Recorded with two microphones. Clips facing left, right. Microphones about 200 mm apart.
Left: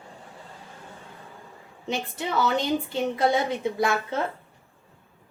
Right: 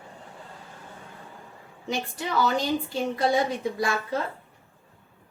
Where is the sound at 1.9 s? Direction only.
25° left (ahead or behind).